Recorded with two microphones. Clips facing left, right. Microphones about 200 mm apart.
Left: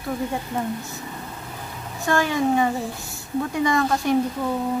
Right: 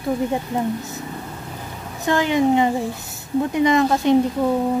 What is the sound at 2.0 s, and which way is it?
A woman's voice, 20° right (ahead or behind).